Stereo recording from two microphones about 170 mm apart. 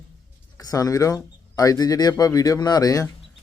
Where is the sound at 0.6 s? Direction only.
20° left (ahead or behind).